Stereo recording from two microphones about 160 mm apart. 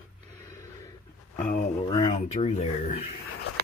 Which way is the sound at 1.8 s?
30° left (ahead or behind).